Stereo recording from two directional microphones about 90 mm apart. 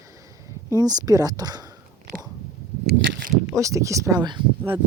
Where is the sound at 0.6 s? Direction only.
40° right (ahead or behind).